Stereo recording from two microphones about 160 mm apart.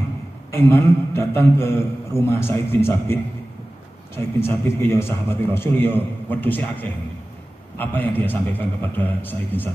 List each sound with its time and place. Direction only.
0.5 s a man's voice: 15° left (ahead or behind)